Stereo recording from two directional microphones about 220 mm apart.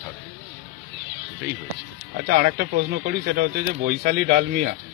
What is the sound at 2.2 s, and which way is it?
Speech, 50° right (ahead or behind).